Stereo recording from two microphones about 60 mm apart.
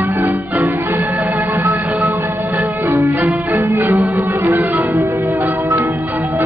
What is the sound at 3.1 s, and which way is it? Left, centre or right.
Music, right.